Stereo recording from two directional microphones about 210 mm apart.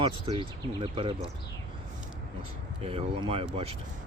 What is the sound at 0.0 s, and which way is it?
Speech, 25° right (ahead or behind).